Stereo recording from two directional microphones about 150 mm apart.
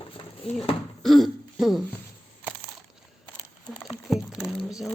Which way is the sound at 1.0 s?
Centre (ahead or behind).